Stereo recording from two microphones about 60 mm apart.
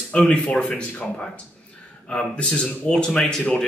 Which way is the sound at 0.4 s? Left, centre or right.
Left.